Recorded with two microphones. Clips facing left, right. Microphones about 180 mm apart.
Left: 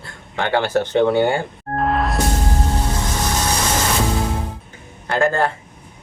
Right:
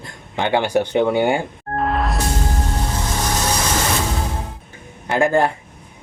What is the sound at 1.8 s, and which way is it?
Music, centre (ahead or behind).